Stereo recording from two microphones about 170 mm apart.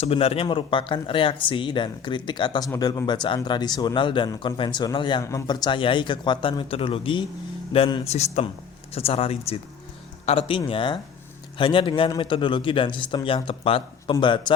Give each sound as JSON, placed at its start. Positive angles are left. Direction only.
{"t": 0.0, "sound": "speech", "side_deg": 35}